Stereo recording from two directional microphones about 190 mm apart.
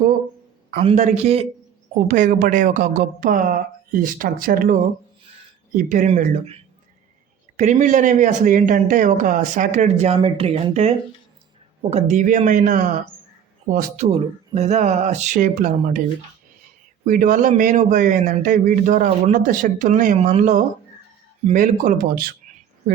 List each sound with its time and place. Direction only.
0.8 s a man's voice: 35° right (ahead or behind)
17.1 s a man's voice: 45° right (ahead or behind)